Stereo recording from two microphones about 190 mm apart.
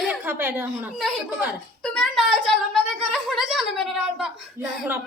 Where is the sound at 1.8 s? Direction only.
Centre (ahead or behind).